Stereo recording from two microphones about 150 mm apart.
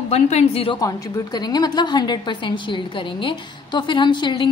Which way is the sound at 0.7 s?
25° left (ahead or behind).